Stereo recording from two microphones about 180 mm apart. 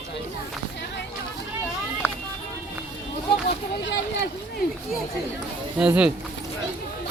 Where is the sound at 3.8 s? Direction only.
80° left.